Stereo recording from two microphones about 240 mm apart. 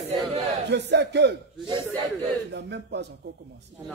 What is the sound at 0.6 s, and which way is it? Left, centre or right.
Speech, right.